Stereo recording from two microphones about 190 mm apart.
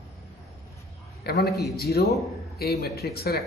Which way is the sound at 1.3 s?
60° left (ahead or behind).